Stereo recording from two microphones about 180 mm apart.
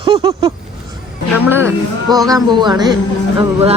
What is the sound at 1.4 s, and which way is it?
Speech, 10° right (ahead or behind).